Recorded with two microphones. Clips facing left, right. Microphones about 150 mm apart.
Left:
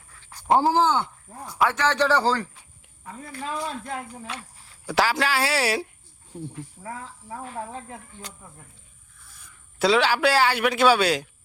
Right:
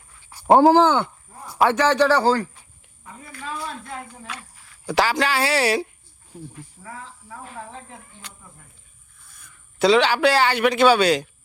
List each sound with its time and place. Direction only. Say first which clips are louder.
0.2 s a sound: even; 10° right (ahead or behind)
0.5 s speech: right 6 dB; 75° right (ahead or behind)
1.7 s a man's voice: right 5 dB; 15° right (ahead or behind)
2.0 s a man's voice: right 1 dB; 5° right (ahead or behind)
2.2 s speech: right 4 dB; 45° right (ahead or behind)
4.9 s a man's voice: right 2 dB; 5° left (ahead or behind)
6.8 s speech: left 3 dB; 20° left (ahead or behind)
9.7 s a man's voice: right 3 dB; 5° left (ahead or behind)